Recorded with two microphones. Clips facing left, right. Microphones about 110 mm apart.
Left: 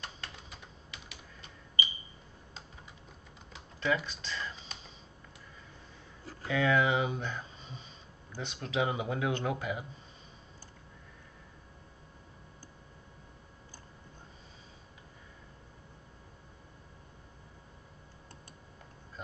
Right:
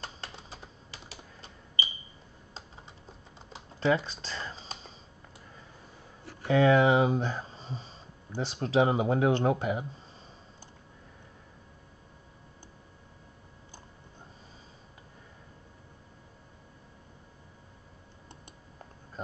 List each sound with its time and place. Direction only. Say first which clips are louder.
0.0 s typewriter: right 3 dB; 30° right (ahead or behind)
3.5 s computer keyboard: right 5 dB; 35° right (ahead or behind)
6.5 s speech: right 6 dB; 35° right (ahead or behind)